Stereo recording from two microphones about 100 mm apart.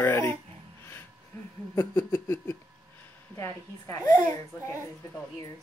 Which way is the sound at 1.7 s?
20° left (ahead or behind).